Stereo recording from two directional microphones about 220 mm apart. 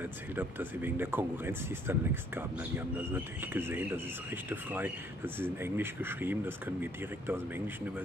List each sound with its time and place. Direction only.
0.0 s speech: 10° right (ahead or behind)